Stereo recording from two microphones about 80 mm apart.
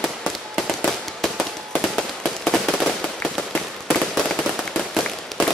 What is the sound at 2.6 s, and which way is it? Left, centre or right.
Firecracker, centre.